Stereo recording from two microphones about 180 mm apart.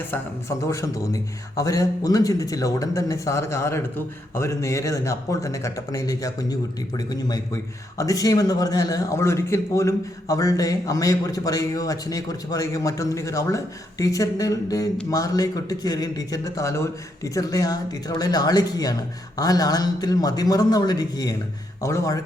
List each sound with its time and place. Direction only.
0.1 s a man's voice: 15° left (ahead or behind)